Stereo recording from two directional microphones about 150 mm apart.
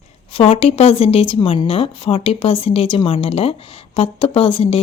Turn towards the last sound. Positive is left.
turn(degrees=35)  # may be behind; listen again after turning